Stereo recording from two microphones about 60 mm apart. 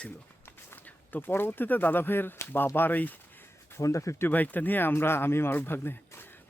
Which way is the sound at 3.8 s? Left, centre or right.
Left.